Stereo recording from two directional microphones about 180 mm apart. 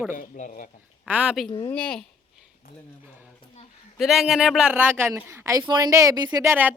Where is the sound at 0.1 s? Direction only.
45° left (ahead or behind).